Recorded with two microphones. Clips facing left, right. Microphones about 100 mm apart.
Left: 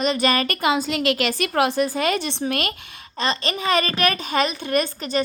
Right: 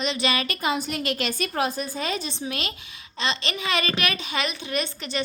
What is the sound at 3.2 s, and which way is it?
A woman's voice, 40° left (ahead or behind).